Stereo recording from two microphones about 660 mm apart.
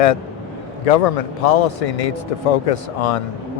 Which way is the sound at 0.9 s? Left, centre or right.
Left.